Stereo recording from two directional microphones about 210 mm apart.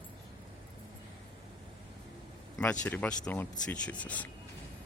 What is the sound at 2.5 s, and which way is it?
Speech, 5° left (ahead or behind).